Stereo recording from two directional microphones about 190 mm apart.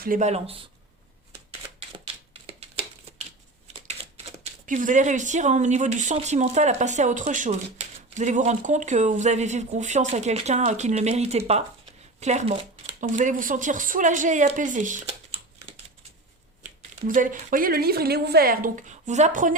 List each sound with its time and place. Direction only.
0.0 s speech: 40° right (ahead or behind)
2.3 s typewriter: 30° right (ahead or behind)
4.6 s speech: 45° right (ahead or behind)
17.1 s a woman's voice: 45° right (ahead or behind)